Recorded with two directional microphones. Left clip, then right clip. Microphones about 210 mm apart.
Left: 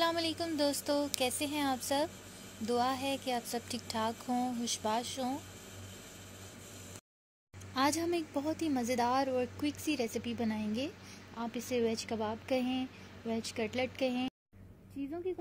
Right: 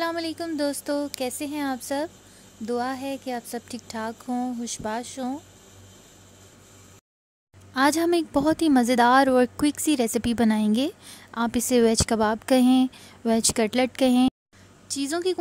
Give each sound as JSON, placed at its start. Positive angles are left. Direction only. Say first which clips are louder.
{"t": 0.0, "sound": "speech", "louder": "right 4 dB", "side_deg": -35}
{"t": 7.7, "sound": "speech", "louder": "right 11 dB", "side_deg": -35}